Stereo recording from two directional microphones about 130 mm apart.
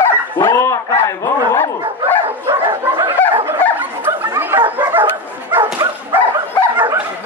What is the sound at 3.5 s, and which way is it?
Chatter, 15° right (ahead or behind).